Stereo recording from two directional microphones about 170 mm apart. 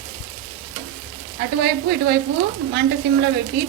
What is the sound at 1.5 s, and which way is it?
Speech, 75° right (ahead or behind).